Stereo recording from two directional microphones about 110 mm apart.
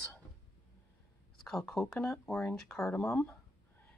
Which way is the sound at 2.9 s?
20° left (ahead or behind).